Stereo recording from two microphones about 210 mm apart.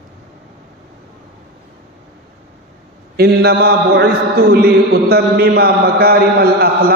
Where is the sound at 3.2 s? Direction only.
50° right (ahead or behind).